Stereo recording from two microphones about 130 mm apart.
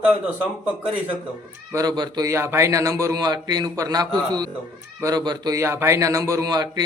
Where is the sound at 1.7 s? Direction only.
30° right (ahead or behind).